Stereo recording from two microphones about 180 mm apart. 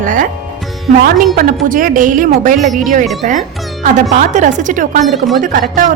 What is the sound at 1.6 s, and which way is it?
Speech, 50° right (ahead or behind).